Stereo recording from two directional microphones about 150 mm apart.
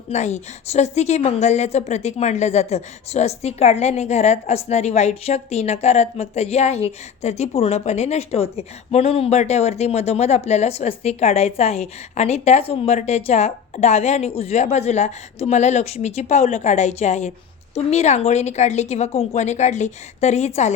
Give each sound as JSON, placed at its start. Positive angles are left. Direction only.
{"t": 0.1, "sound": "a woman's voice", "side_deg": 50}